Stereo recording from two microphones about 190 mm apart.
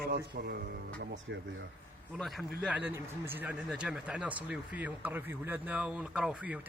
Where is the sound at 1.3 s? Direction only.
65° right (ahead or behind).